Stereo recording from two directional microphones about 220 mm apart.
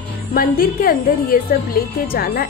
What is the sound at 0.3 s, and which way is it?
A woman's voice, 40° left (ahead or behind).